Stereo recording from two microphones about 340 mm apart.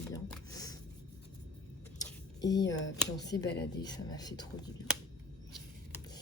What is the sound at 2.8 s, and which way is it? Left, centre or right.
Speech, left.